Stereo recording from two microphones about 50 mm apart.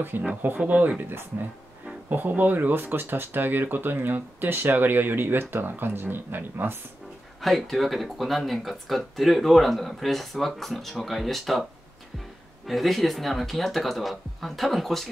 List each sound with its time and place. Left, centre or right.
0.1 s speech: right
0.7 s speech: right
2.0 s speech: right
7.4 s speech: centre
12.6 s speech: centre